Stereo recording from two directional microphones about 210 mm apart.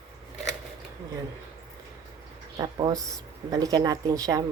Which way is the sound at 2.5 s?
20° right (ahead or behind).